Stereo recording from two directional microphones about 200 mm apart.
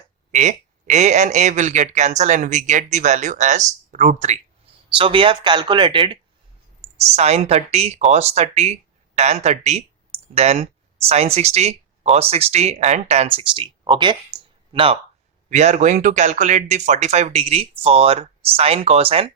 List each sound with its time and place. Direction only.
0.3 s speech: 35° right (ahead or behind)
7.2 s speech: 30° right (ahead or behind)